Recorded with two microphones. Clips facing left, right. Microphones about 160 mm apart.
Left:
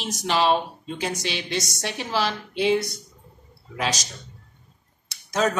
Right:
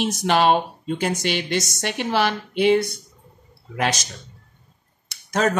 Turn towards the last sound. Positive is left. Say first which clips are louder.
# right 2 dB
turn(degrees=-60)  # may be behind; listen again after turning